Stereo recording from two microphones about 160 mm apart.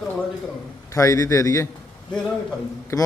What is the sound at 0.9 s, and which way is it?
Speech, 20° left (ahead or behind).